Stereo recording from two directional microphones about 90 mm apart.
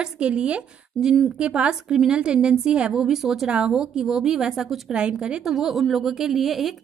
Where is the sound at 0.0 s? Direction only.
10° right (ahead or behind).